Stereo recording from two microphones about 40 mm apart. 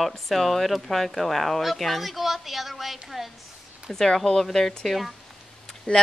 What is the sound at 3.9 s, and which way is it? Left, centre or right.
A woman's voice, centre.